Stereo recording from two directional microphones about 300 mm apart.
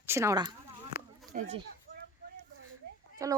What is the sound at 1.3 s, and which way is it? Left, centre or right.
Speech, right.